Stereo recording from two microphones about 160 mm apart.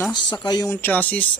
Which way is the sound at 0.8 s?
10° left (ahead or behind).